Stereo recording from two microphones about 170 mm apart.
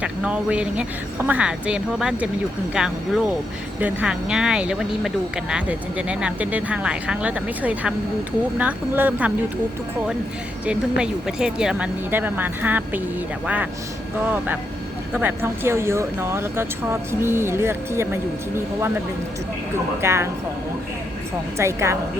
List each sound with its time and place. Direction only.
0.0 s speech: 5° right (ahead or behind)
10.7 s speech: 5° right (ahead or behind)
14.3 s speech: 10° right (ahead or behind)
20.0 s speech: 15° right (ahead or behind)
21.6 s speech: 15° right (ahead or behind)